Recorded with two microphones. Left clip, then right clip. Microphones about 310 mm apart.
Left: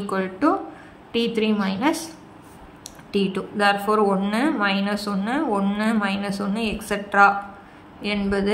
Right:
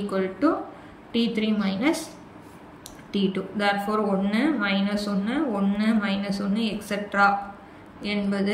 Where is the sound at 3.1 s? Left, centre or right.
Centre.